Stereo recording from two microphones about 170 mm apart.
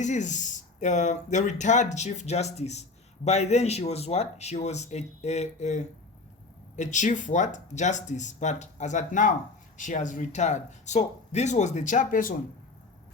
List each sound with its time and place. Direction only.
0.0 s speech: 45° left (ahead or behind)